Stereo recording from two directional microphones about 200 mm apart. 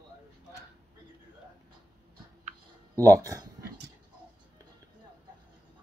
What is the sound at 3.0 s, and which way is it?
Speech, 15° right (ahead or behind).